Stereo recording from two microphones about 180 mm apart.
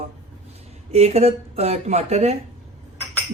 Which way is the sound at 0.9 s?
35° right (ahead or behind).